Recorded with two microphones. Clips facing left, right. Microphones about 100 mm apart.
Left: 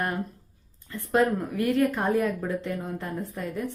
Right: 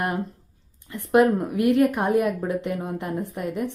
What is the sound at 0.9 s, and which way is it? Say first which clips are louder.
A woman's voice: right 5 dB; 15° right (ahead or behind).